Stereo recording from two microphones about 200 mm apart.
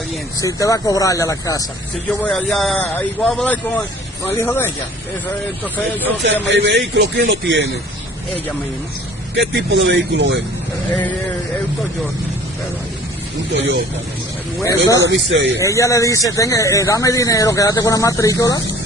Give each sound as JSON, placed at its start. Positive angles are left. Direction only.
{"t": 0.4, "sound": "speech", "side_deg": 15}
{"t": 2.0, "sound": "speech", "side_deg": 5}
{"t": 6.4, "sound": "a man's voice", "side_deg": -60}
{"t": 9.3, "sound": "a man's voice", "side_deg": -60}
{"t": 13.5, "sound": "speech", "side_deg": -65}
{"t": 15.0, "sound": "a man's voice", "side_deg": -65}
{"t": 15.6, "sound": "speech", "side_deg": 15}